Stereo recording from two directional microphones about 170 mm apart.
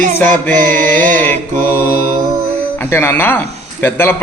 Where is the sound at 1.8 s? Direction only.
65° left (ahead or behind).